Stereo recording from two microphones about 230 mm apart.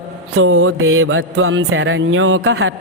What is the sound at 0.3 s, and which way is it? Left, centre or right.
Mantra, right.